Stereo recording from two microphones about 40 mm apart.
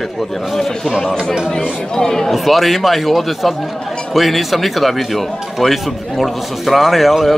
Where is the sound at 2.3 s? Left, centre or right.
Centre.